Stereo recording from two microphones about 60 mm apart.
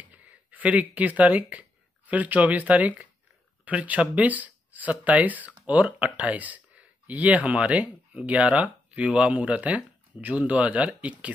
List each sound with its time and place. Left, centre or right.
0.0 s speech: right